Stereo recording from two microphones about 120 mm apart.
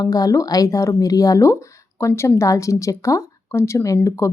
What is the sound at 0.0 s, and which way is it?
Speech, 30° left (ahead or behind).